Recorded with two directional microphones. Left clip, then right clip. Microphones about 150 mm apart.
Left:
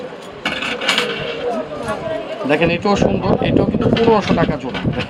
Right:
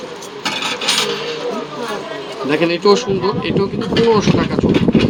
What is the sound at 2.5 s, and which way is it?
Speech, 35° left (ahead or behind).